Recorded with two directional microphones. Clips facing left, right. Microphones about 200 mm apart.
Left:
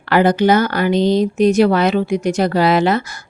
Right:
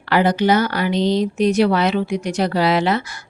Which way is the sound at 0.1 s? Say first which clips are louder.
Left 3 dB; 50° left (ahead or behind).